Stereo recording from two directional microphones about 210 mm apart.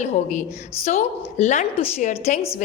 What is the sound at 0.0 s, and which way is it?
A woman's voice, 35° left (ahead or behind).